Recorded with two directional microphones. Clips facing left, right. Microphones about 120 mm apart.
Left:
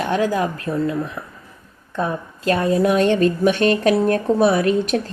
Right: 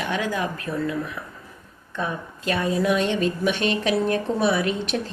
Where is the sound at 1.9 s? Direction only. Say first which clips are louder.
Left 5 dB; 35° left (ahead or behind).